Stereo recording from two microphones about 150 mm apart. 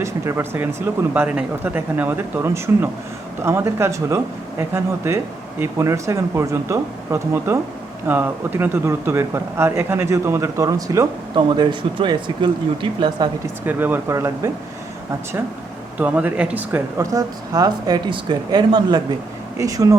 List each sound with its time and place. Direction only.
0.0 s speech: 15° right (ahead or behind)
13.7 s speech: 15° right (ahead or behind)
16.0 s speech: 10° right (ahead or behind)